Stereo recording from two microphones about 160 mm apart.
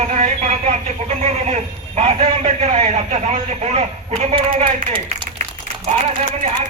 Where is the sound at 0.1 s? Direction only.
45° right (ahead or behind).